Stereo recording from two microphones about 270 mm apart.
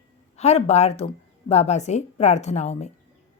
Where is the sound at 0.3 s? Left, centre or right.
Left.